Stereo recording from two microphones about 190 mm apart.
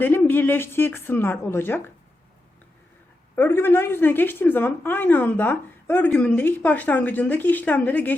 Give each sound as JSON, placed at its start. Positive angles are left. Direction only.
{"t": 0.0, "sound": "a woman's voice", "side_deg": 10}
{"t": 3.3, "sound": "a woman's voice", "side_deg": 10}